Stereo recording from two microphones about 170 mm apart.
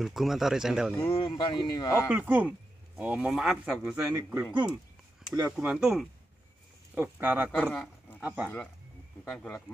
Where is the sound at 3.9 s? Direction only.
15° right (ahead or behind).